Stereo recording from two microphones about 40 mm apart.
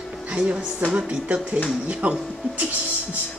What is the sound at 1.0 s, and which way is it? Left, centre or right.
Speech, right.